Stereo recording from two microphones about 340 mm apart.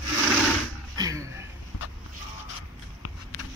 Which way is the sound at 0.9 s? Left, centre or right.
Centre.